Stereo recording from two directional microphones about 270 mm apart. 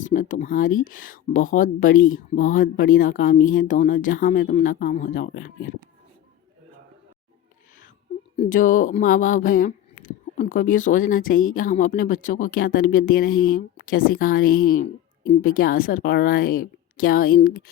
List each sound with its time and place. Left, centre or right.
0.0 s speech: left
8.4 s speech: left